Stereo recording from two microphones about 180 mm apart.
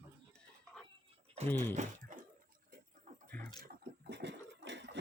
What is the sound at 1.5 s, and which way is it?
Speech, 10° left (ahead or behind).